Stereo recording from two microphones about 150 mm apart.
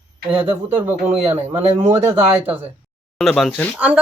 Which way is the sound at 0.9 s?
15° right (ahead or behind).